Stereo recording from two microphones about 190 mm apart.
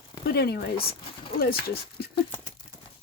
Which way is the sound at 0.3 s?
55° left (ahead or behind).